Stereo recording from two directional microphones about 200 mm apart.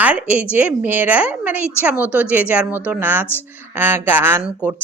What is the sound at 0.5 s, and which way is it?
Speech, 10° right (ahead or behind).